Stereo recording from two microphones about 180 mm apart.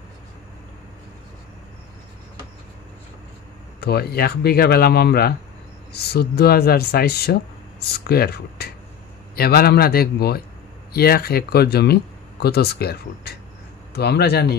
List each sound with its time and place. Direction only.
3.8 s speech: 60° left (ahead or behind)